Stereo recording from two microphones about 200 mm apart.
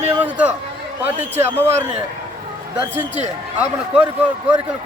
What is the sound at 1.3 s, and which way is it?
Speech, 10° right (ahead or behind).